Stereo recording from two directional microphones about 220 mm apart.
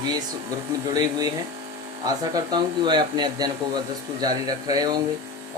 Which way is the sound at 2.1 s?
20° right (ahead or behind).